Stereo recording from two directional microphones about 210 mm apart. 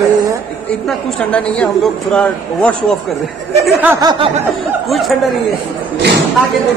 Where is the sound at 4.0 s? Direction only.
20° right (ahead or behind).